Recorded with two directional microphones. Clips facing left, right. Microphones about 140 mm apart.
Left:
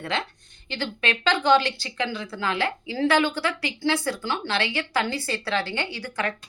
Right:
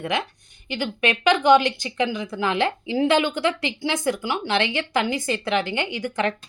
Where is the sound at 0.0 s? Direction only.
15° right (ahead or behind).